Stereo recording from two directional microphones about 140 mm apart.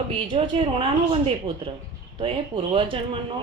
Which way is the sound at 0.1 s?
40° right (ahead or behind).